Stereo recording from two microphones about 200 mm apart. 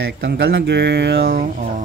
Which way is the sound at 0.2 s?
50° right (ahead or behind).